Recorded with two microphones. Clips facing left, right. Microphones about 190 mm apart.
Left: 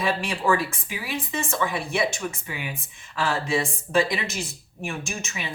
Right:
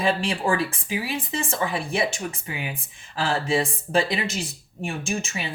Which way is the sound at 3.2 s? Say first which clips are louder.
Right 1 dB; 30° right (ahead or behind).